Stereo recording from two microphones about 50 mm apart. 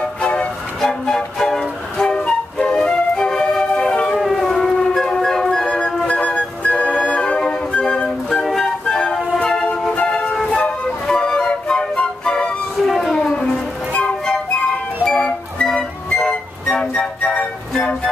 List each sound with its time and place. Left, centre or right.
0.2 s music: left
0.7 s train: centre
4.2 s a sound: centre
4.9 s music: centre
6.2 s music: left
7.7 s flute: left
8.8 s music: centre
10.5 s flute: centre
12.8 s cat: centre
14.2 s music: centre
17.2 s music: left